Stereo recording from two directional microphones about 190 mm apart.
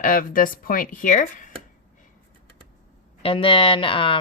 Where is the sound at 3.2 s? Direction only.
30° left (ahead or behind).